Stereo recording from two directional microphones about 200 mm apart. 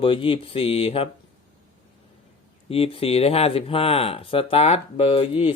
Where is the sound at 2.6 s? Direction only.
30° left (ahead or behind).